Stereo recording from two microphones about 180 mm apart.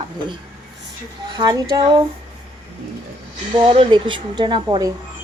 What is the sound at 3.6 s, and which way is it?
A woman's voice, 30° right (ahead or behind).